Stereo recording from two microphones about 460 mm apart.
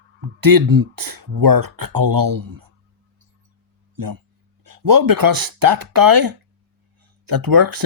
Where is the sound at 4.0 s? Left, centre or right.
Right.